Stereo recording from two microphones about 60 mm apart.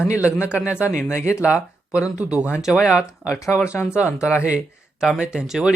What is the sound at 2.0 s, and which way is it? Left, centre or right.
Speech, centre.